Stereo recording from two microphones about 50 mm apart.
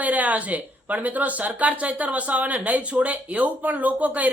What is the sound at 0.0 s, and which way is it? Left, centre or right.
Speech, right.